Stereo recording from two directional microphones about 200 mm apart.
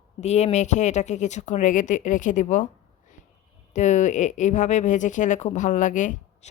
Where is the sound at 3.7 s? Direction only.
35° left (ahead or behind).